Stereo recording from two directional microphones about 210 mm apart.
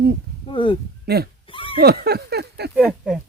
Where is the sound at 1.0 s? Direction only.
50° right (ahead or behind).